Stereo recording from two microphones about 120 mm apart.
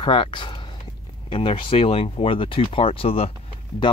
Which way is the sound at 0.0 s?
45° left (ahead or behind).